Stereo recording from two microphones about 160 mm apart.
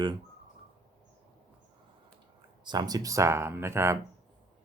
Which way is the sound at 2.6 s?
25° right (ahead or behind).